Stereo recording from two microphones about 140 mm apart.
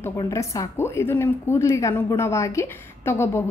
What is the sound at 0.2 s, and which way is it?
A woman's voice, 25° left (ahead or behind).